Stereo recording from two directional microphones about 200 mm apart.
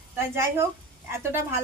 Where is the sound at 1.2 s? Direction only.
10° right (ahead or behind).